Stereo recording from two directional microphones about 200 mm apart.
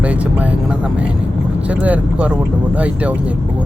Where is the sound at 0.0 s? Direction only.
5° right (ahead or behind).